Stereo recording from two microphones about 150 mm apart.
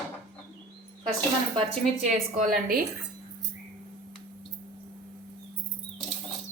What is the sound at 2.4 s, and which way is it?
Speech, 70° right (ahead or behind).